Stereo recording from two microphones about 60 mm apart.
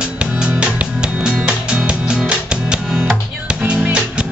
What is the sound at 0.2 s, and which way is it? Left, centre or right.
Music, centre.